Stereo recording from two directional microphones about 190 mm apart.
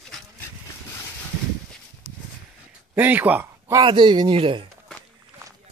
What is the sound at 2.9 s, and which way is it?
Speech, 10° right (ahead or behind).